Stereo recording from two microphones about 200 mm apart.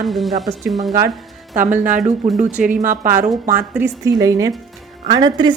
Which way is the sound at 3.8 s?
15° right (ahead or behind).